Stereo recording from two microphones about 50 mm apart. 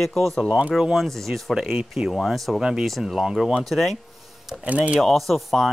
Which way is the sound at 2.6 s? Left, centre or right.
Centre.